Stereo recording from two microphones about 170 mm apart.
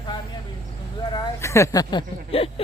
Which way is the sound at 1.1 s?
20° left (ahead or behind).